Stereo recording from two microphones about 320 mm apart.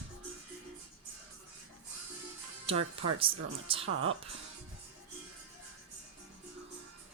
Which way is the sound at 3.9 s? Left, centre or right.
Right.